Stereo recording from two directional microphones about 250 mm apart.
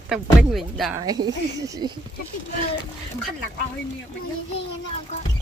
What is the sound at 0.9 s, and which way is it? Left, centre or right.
Speech, centre.